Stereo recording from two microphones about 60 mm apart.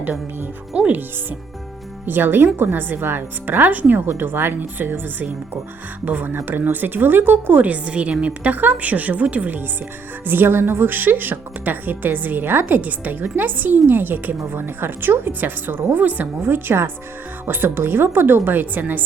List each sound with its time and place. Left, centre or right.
0.7 s speech: centre
2.0 s speech: right
7.6 s a woman's voice: right
16.5 s speech: right